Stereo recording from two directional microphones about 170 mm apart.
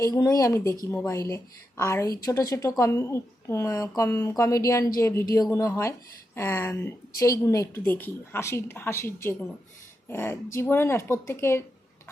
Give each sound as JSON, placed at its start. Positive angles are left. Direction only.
{"t": 0.0, "sound": "a woman's voice", "side_deg": 20}